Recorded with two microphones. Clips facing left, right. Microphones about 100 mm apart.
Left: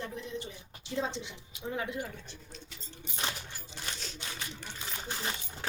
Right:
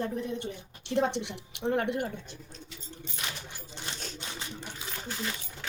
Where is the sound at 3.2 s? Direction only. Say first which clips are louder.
Left 3 dB; 30° left (ahead or behind).